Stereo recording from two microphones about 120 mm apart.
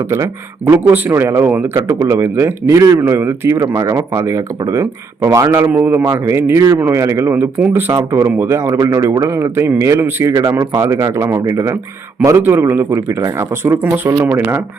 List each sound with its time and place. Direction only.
0.1 s a man's voice: 20° right (ahead or behind)